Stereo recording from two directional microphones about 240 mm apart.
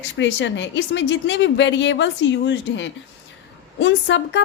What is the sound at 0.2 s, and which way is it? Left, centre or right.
A woman's voice, left.